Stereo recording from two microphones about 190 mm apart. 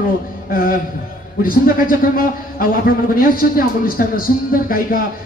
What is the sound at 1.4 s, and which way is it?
A man's voice, 45° left (ahead or behind).